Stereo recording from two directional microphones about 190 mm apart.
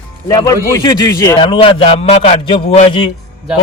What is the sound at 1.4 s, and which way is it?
Speech, 25° left (ahead or behind).